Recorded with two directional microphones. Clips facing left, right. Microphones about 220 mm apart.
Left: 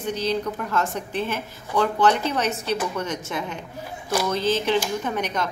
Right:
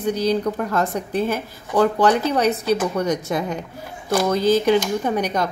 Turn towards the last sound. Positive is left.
turn(degrees=-35)  # may be behind; listen again after turning